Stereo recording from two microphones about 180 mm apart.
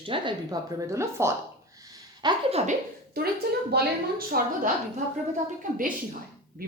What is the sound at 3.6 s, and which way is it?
A woman's voice, 60° right (ahead or behind).